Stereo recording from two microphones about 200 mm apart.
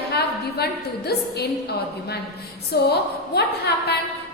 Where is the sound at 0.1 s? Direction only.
55° left (ahead or behind).